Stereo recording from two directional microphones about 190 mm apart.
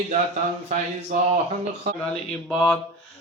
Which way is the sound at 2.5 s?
Centre (ahead or behind).